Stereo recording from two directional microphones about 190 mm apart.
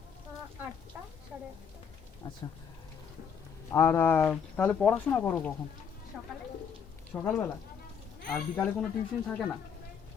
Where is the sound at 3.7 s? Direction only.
10° left (ahead or behind).